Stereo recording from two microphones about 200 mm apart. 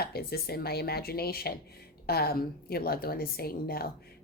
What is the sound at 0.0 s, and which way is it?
Speech, 50° left (ahead or behind).